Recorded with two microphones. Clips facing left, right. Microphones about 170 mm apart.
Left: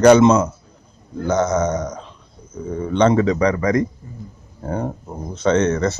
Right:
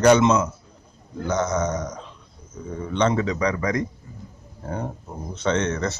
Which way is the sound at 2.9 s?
45° left (ahead or behind).